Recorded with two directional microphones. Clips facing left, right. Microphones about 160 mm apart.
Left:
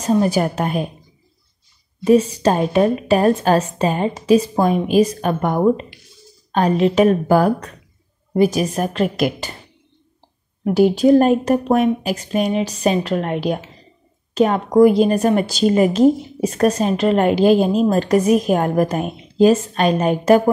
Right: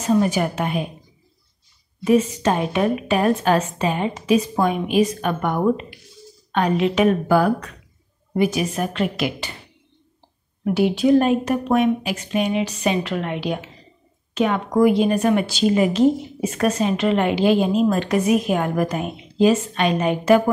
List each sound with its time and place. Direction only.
0.0 s speech: 35° left (ahead or behind)
2.0 s speech: 35° left (ahead or behind)
10.6 s a woman's voice: 40° left (ahead or behind)